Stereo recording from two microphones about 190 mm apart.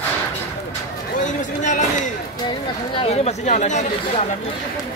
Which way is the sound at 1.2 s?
40° left (ahead or behind).